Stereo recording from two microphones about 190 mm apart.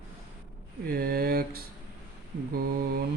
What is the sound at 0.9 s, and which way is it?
Speech, 50° right (ahead or behind).